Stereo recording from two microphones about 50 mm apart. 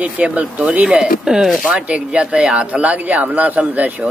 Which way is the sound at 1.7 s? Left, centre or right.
Right.